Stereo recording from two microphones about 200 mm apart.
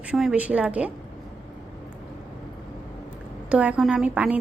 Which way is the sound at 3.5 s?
5° right (ahead or behind).